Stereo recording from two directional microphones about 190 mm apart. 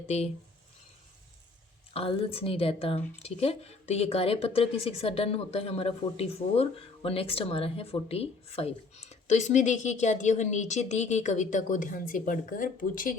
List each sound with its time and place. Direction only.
1.9 s a woman's voice: 30° left (ahead or behind); by 13.1 s 45° left (ahead or behind)